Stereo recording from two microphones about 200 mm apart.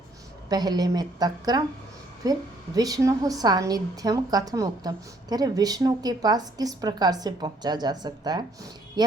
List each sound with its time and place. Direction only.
0.5 s a woman's voice: 20° right (ahead or behind)